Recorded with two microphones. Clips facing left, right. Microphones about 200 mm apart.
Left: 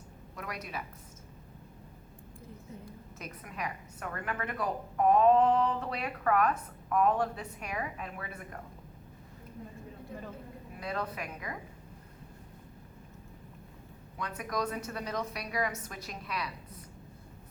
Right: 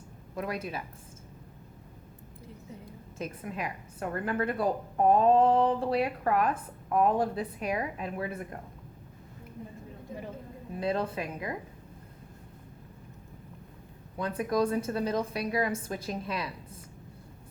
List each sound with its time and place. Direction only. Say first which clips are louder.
0.3 s speech: right 7 dB; 30° right (ahead or behind)
3.2 s a woman's voice: right 6 dB; 30° right (ahead or behind)
10.8 s speech: right 6 dB; 30° right (ahead or behind)
14.2 s speech: right 7 dB; 30° right (ahead or behind)